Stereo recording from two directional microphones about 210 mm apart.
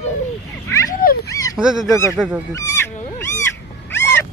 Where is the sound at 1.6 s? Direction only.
Centre (ahead or behind).